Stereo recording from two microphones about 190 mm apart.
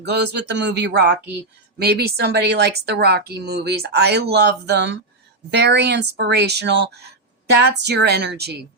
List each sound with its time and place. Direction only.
0.0 s speech: 60° right (ahead or behind)